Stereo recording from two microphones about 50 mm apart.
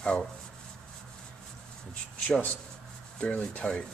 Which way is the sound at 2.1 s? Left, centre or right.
Left.